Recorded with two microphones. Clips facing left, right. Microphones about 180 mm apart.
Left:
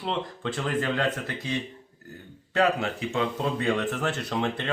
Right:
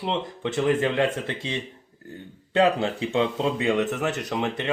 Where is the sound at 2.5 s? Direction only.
30° right (ahead or behind).